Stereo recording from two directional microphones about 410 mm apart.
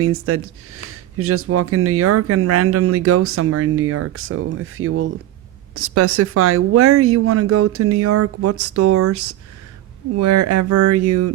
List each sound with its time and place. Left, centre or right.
0.0 s speech: right